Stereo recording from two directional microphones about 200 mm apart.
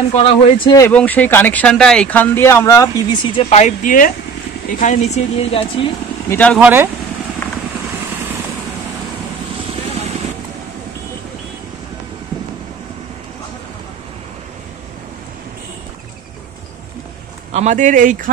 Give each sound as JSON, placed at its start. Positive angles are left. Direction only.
{"t": 0.1, "sound": "speech", "side_deg": 30}
{"t": 0.7, "sound": "speech", "side_deg": 10}
{"t": 6.2, "sound": "speech", "side_deg": 10}
{"t": 6.6, "sound": "speech", "side_deg": -10}
{"t": 17.5, "sound": "speech", "side_deg": -35}